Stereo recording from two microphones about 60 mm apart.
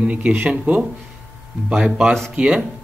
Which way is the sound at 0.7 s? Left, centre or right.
Right.